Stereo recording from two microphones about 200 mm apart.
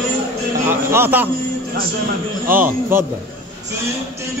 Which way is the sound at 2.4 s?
10° right (ahead or behind).